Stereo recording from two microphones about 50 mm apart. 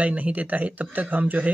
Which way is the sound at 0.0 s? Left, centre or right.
Right.